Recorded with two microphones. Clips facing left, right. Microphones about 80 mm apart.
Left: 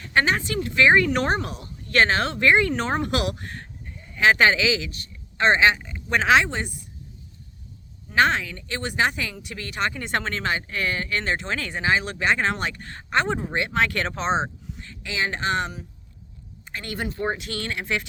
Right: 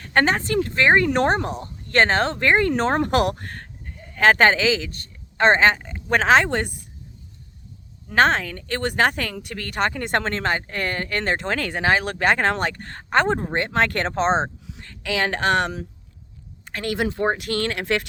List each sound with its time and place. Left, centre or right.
0.0 s speech: right
6.5 s speech: right
8.1 s speech: right
14.7 s speech: right